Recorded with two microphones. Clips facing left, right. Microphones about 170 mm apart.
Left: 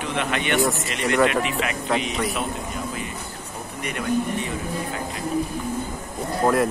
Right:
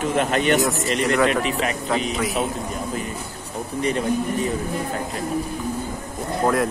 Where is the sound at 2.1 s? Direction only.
Centre (ahead or behind).